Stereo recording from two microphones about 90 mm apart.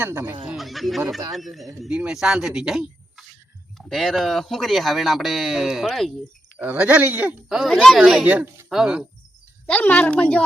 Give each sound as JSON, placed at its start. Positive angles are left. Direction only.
{"t": 0.0, "sound": "speech", "side_deg": -25}
{"t": 0.5, "sound": "speech", "side_deg": 0}
{"t": 1.9, "sound": "speech", "side_deg": -10}
{"t": 6.6, "sound": "speech", "side_deg": -15}
{"t": 7.5, "sound": "speech", "side_deg": 0}
{"t": 8.0, "sound": "speech", "side_deg": -10}
{"t": 9.6, "sound": "a woman's voice", "side_deg": 15}